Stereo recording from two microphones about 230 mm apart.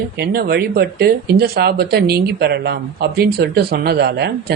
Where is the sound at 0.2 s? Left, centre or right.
Right.